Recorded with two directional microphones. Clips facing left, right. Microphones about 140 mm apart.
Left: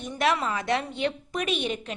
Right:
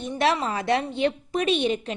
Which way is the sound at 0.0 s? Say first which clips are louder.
Right 2 dB; 30° right (ahead or behind).